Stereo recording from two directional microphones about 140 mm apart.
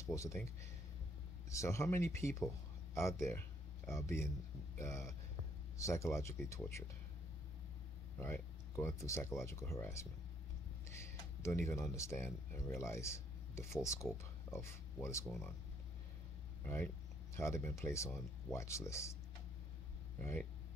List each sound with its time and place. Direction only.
0.0 s speech: 20° left (ahead or behind)
1.5 s speech: 20° left (ahead or behind)
8.2 s speech: 15° left (ahead or behind)
15.2 s speech: 10° left (ahead or behind)
16.6 s speech: 15° left (ahead or behind)
20.2 s speech: 15° left (ahead or behind)